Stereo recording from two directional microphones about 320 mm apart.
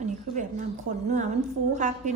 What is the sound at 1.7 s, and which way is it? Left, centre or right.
Speech, right.